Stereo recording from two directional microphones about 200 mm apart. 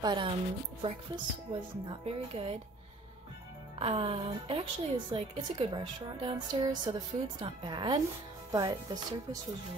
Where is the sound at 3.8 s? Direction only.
25° right (ahead or behind).